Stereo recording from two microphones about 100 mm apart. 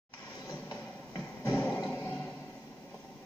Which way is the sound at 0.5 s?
45° left (ahead or behind).